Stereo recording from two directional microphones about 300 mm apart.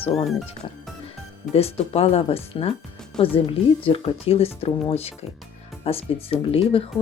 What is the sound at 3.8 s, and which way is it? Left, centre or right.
Speech, centre.